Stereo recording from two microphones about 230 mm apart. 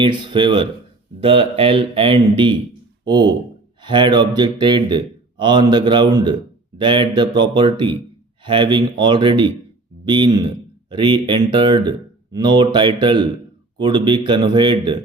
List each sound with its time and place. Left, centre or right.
0.0 s speech: right